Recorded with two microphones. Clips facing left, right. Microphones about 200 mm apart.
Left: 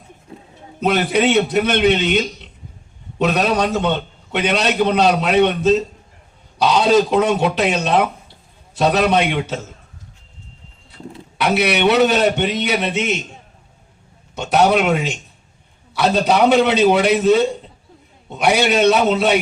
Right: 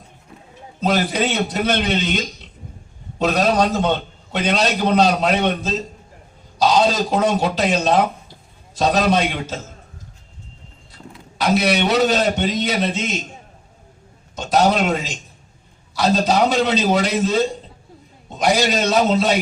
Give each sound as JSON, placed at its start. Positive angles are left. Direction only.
{"t": 1.1, "sound": "speech", "side_deg": 60}
{"t": 3.5, "sound": "a man's voice", "side_deg": 65}
{"t": 11.3, "sound": "a sound", "side_deg": 65}
{"t": 11.7, "sound": "speech", "side_deg": 65}
{"t": 14.5, "sound": "speech", "side_deg": 65}